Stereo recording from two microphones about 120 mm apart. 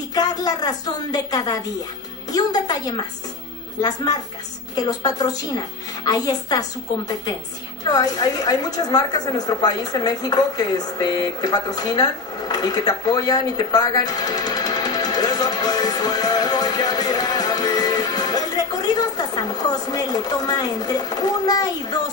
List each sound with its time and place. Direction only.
0.1 s a woman's voice: 35° left (ahead or behind)